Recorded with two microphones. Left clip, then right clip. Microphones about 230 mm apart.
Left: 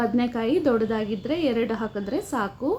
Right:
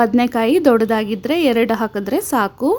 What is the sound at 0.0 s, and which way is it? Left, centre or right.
A woman's voice, right.